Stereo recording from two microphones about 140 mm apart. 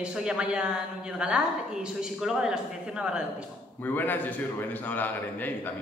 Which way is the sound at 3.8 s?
15° left (ahead or behind).